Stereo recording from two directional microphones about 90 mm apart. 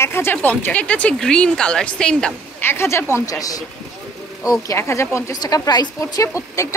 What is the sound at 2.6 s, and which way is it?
Speech, 30° left (ahead or behind).